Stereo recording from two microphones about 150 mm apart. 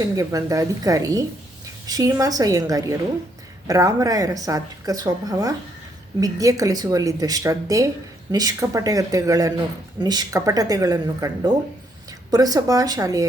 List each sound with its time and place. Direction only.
0.0 s speech: 25° right (ahead or behind)